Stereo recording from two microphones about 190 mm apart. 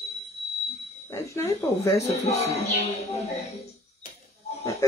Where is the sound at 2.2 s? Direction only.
35° left (ahead or behind).